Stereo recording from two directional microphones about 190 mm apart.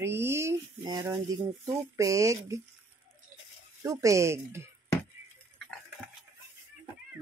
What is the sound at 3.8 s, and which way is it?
Speech, 15° right (ahead or behind).